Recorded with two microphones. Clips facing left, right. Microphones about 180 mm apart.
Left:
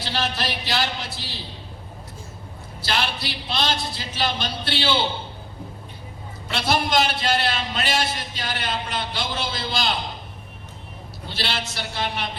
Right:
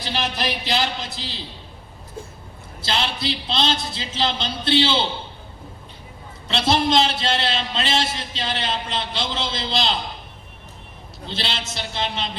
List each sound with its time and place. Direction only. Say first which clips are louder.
0.0 s speech: right 1 dB; 15° right (ahead or behind)
2.8 s a man's voice: right 2 dB; 20° right (ahead or behind)
6.5 s a man's voice: right 3 dB; 25° right (ahead or behind)
11.3 s a man's voice: even; 25° right (ahead or behind)